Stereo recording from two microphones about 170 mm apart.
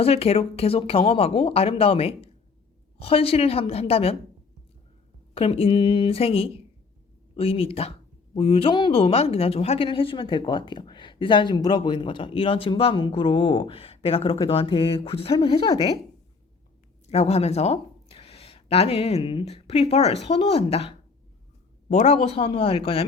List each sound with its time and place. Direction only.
0.0 s a woman's voice: 35° left (ahead or behind)
5.3 s a woman's voice: 35° left (ahead or behind)
17.1 s a woman's voice: 40° left (ahead or behind)